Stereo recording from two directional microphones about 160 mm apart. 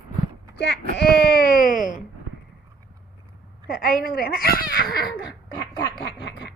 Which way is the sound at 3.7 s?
65° left (ahead or behind).